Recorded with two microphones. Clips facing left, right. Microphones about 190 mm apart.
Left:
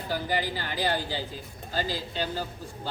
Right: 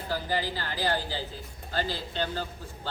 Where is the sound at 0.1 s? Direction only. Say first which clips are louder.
Left 1 dB; 15° left (ahead or behind).